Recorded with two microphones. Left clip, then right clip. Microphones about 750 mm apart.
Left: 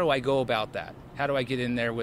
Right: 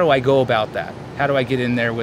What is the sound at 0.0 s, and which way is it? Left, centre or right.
Speech, left.